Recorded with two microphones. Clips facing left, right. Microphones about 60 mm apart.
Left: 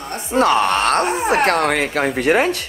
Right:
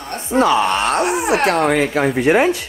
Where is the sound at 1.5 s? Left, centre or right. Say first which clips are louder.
Right 2 dB; left.